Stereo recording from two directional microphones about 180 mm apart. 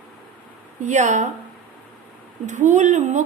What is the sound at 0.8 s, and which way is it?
Speech, 40° right (ahead or behind).